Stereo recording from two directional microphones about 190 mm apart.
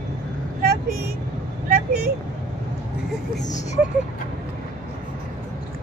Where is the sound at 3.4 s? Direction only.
40° left (ahead or behind).